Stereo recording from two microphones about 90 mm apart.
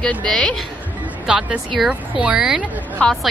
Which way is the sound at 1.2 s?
10° right (ahead or behind).